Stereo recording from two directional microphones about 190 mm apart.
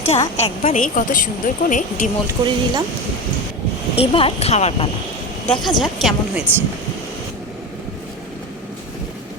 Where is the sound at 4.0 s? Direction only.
30° left (ahead or behind).